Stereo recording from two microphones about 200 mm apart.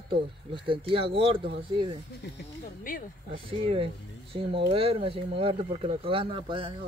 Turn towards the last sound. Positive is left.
turn(degrees=-25)  # may be behind; listen again after turning